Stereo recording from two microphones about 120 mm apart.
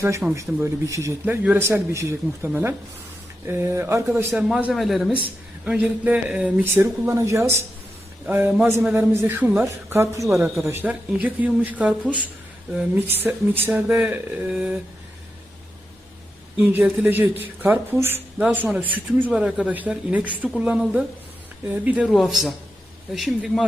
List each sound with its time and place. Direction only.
0.3 s a man's voice: 25° right (ahead or behind)
1.2 s a man's voice: 15° right (ahead or behind)
2.5 s a man's voice: 15° right (ahead or behind)
4.4 s a man's voice: 5° right (ahead or behind)
10.0 s a man's voice: 25° right (ahead or behind); by 13.0 s 5° right (ahead or behind)
13.1 s speech: 15° right (ahead or behind)
16.6 s a man's voice: 10° right (ahead or behind)